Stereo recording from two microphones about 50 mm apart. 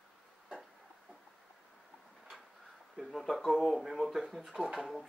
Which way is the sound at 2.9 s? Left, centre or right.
Centre.